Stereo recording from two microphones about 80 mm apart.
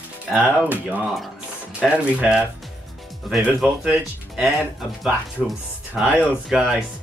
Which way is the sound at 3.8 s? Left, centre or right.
Centre.